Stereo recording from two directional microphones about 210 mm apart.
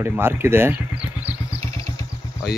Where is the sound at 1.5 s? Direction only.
15° left (ahead or behind).